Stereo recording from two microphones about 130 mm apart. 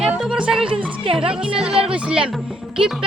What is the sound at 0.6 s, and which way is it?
Speech, 45° right (ahead or behind).